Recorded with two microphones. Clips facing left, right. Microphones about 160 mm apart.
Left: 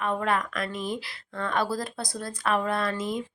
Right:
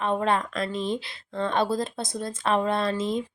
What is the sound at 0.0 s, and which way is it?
Speech, 25° right (ahead or behind).